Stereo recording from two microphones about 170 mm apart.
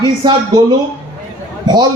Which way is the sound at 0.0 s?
25° right (ahead or behind).